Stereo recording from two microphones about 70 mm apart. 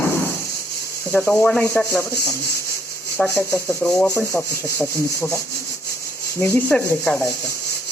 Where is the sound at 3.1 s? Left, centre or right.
Left.